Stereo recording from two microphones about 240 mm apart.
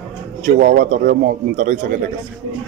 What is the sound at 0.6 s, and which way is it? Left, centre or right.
A man's voice, right.